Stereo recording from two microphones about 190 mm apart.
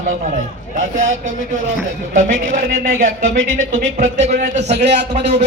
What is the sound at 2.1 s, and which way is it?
A man's voice, 45° right (ahead or behind).